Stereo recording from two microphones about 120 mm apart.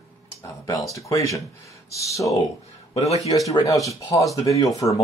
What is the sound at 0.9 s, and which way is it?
Speech, 25° left (ahead or behind).